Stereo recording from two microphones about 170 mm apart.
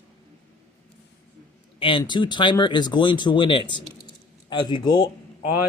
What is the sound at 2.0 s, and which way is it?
Speech, 25° left (ahead or behind).